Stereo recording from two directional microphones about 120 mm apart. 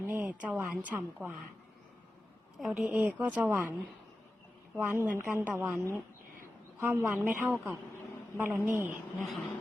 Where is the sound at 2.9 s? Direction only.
15° right (ahead or behind).